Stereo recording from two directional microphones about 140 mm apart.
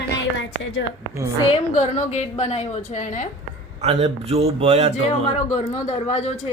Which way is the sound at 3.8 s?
45° right (ahead or behind).